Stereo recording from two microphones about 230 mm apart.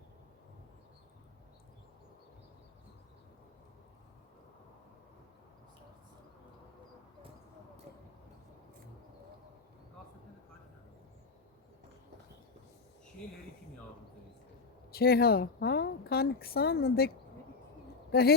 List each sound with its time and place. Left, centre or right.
14.9 s speech: left
18.1 s speech: left